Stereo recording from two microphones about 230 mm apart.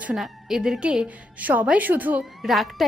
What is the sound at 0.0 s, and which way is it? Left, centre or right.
A woman's voice, centre.